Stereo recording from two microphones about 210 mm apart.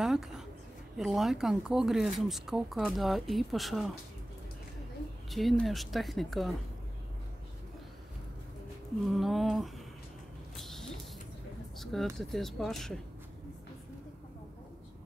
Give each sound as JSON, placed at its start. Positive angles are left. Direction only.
{"t": 0.0, "sound": "a sound", "side_deg": 0}
{"t": 0.9, "sound": "speech", "side_deg": 0}
{"t": 5.3, "sound": "speech", "side_deg": 0}
{"t": 9.0, "sound": "speech", "side_deg": 0}
{"t": 10.5, "sound": "a sound", "side_deg": 0}
{"t": 11.8, "sound": "speech", "side_deg": 0}